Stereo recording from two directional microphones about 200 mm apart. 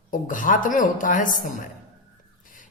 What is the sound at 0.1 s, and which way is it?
A man's voice, 40° left (ahead or behind).